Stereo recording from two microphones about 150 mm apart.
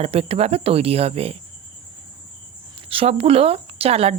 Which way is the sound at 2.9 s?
40° right (ahead or behind).